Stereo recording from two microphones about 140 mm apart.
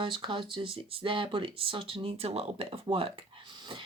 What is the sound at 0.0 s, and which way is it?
Speech, 35° right (ahead or behind).